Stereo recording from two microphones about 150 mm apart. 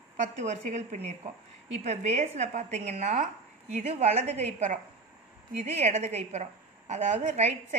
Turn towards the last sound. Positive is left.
turn(degrees=-50)  # may be behind; listen again after turning